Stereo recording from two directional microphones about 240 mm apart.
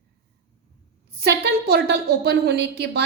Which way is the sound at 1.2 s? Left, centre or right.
Right.